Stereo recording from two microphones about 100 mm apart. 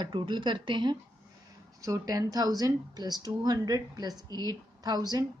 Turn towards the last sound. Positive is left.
turn(degrees=-40)  # may be behind; listen again after turning